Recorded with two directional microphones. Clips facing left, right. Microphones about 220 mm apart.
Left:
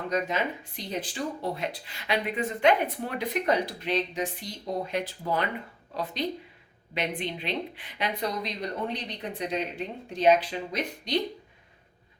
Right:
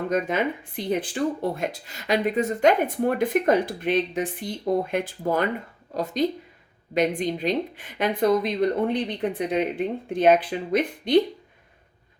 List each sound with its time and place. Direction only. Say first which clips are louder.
0.1 s speech: right 3 dB; 55° right (ahead or behind)